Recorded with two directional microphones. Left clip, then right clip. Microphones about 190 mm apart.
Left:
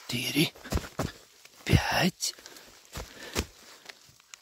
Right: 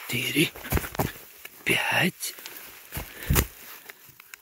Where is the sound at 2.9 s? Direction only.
35° right (ahead or behind).